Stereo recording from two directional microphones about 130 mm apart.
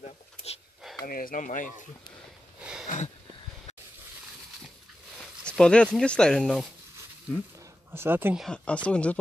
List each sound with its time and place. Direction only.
0.0 s a sound: 55° left (ahead or behind)
1.0 s speech: 90° left
2.9 s speech: 80° left
5.4 s a sound: 10° left (ahead or behind)
5.9 s speech: 5° left (ahead or behind)
7.9 s speech: 15° right (ahead or behind)
8.4 s speech: 5° left (ahead or behind)